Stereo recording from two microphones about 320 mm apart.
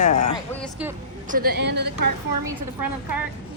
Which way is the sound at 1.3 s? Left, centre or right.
Right.